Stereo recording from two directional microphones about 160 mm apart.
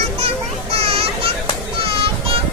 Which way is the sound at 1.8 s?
35° right (ahead or behind).